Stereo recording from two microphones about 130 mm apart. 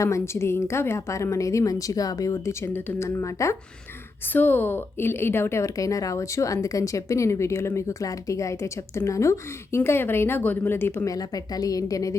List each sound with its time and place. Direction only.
0.0 s a woman's voice: 20° left (ahead or behind)